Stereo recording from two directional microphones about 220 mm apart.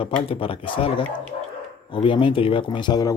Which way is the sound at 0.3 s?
25° left (ahead or behind).